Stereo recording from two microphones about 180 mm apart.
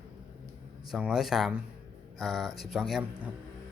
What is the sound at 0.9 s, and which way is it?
Speech, 5° right (ahead or behind).